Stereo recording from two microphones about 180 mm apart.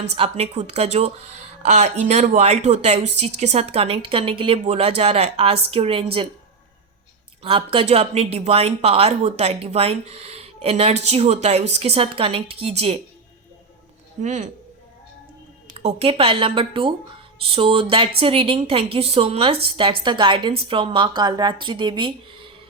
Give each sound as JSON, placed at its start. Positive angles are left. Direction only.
{"t": 0.0, "sound": "speech", "side_deg": -35}
{"t": 7.4, "sound": "speech", "side_deg": -30}
{"t": 14.2, "sound": "speech", "side_deg": -40}
{"t": 15.7, "sound": "a woman's voice", "side_deg": -35}